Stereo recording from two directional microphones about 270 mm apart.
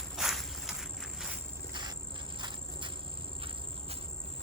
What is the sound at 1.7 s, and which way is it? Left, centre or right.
Insect, centre.